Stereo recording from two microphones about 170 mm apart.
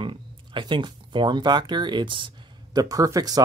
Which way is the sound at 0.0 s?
30° right (ahead or behind).